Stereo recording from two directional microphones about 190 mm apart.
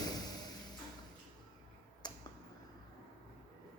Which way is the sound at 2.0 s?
20° left (ahead or behind).